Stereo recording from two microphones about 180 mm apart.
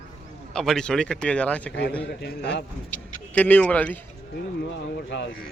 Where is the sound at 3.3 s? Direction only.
10° left (ahead or behind).